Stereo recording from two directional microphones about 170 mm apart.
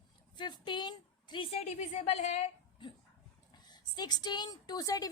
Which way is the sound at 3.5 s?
25° left (ahead or behind).